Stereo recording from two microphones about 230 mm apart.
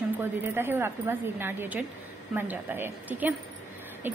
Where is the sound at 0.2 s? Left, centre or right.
Centre.